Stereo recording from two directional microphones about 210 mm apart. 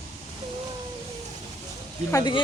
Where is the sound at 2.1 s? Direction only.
20° left (ahead or behind).